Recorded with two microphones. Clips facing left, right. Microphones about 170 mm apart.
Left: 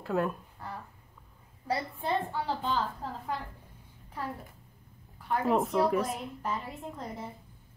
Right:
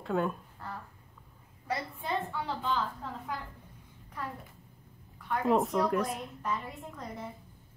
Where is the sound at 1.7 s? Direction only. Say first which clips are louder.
Left 3 dB; 30° left (ahead or behind).